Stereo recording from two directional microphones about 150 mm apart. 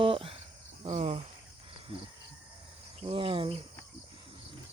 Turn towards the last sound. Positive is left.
turn(degrees=-35)  # may be behind; listen again after turning